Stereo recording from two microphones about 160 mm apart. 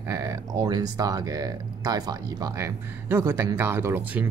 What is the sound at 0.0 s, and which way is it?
Speech, 20° right (ahead or behind).